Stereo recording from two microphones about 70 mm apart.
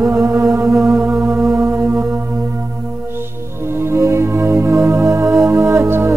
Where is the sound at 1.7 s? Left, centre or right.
Right.